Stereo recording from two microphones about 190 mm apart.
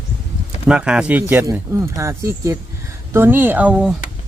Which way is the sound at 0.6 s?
5° right (ahead or behind).